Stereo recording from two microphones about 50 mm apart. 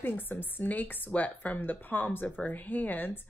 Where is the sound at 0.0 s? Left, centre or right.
Left.